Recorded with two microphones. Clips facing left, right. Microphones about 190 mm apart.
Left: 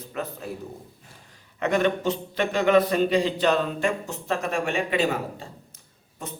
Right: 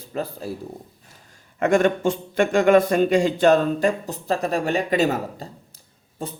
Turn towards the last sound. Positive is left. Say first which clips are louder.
# right 5 dB
turn(degrees=-30)  # may be behind; listen again after turning